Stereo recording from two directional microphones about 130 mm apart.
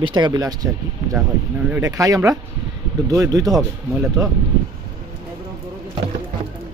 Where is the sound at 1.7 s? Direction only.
25° right (ahead or behind).